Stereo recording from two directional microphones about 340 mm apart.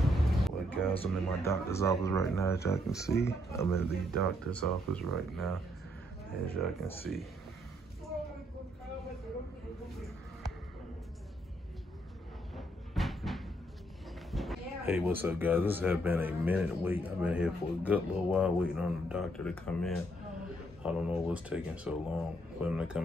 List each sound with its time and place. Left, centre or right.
0.1 s music: centre
0.9 s speech: centre
6.6 s speech: centre
12.5 s train: centre
14.3 s speech: centre